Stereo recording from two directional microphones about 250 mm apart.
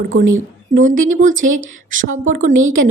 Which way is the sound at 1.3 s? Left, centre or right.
Right.